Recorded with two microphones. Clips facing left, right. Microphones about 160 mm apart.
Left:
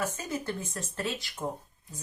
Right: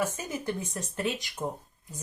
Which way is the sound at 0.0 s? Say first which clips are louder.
Right 2 dB; 15° right (ahead or behind).